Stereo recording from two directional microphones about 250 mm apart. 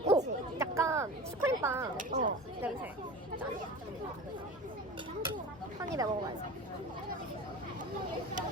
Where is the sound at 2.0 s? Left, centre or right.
Right.